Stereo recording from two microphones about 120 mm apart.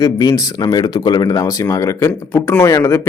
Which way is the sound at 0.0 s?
30° left (ahead or behind).